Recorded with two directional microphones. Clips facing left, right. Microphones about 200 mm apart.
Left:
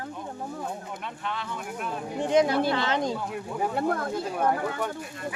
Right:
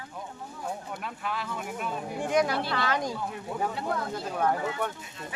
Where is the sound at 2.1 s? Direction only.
20° left (ahead or behind).